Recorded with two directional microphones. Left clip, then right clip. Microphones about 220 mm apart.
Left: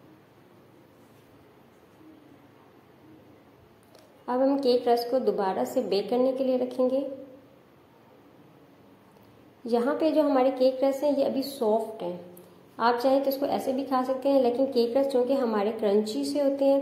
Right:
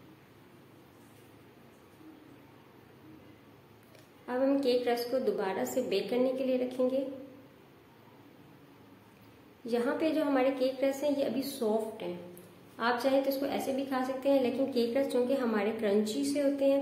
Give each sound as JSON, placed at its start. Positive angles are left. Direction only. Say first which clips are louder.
{"t": 4.3, "sound": "a woman's voice", "louder": "left 5 dB", "side_deg": 15}
{"t": 9.9, "sound": "a woman's voice", "louder": "left 7 dB", "side_deg": 15}